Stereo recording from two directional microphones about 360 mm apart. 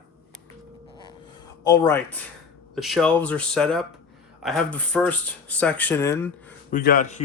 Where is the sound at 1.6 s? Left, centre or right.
Centre.